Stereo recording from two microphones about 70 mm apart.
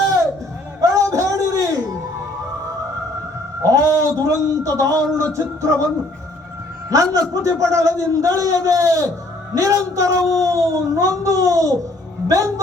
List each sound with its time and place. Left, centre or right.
0.8 s music: right
3.6 s a sound: right
6.9 s speech: right